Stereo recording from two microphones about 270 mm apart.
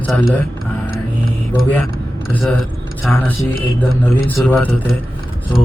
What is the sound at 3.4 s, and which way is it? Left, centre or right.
Speech, left.